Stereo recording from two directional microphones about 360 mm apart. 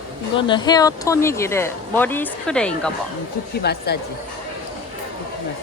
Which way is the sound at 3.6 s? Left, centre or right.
Left.